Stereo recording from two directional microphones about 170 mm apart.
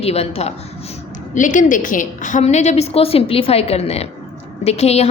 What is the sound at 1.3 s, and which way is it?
A woman's voice, 50° left (ahead or behind).